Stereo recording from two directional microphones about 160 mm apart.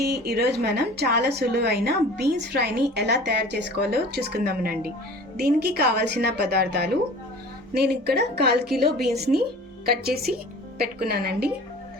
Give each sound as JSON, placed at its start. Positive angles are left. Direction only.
{"t": 0.0, "sound": "a woman's voice", "side_deg": -80}
{"t": 11.0, "sound": "a woman's voice", "side_deg": -75}